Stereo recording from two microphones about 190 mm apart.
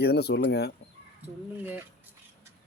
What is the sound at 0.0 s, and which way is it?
Speech, 60° left (ahead or behind).